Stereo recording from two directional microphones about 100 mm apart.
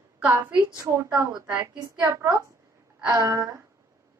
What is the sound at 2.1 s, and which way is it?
A woman's voice, 30° right (ahead or behind).